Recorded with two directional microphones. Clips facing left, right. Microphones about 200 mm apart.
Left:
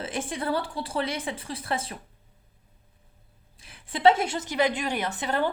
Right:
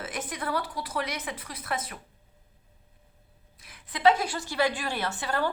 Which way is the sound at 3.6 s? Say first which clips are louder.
Left 3 dB; 30° left (ahead or behind).